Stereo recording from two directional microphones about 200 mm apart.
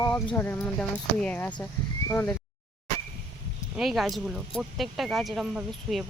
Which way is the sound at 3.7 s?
Centre (ahead or behind).